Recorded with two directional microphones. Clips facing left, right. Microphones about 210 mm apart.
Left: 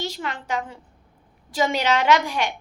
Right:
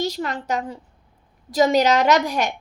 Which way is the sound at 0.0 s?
40° right (ahead or behind).